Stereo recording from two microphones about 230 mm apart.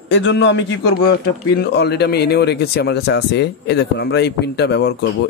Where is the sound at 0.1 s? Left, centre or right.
Left.